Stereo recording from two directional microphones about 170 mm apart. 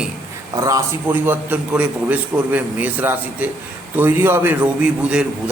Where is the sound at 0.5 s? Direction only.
20° right (ahead or behind).